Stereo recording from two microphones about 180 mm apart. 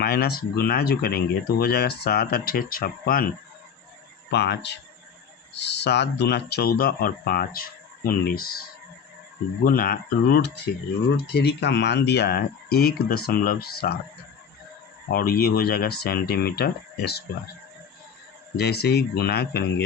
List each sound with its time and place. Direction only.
0.0 s speech: 60° left (ahead or behind)
4.3 s speech: 70° left (ahead or behind)
9.6 s speech: 55° left (ahead or behind)
15.1 s speech: 55° left (ahead or behind)
18.5 s speech: 65° left (ahead or behind)